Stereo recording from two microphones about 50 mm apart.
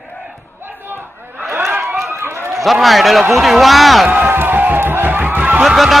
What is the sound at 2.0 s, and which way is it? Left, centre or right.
Run, right.